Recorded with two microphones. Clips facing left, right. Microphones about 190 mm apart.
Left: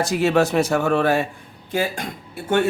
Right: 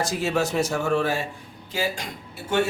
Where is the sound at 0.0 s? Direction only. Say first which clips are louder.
Left 6 dB; 60° left (ahead or behind).